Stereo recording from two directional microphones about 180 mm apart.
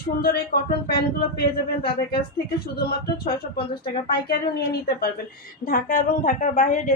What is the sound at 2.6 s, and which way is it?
Speech, 60° left (ahead or behind).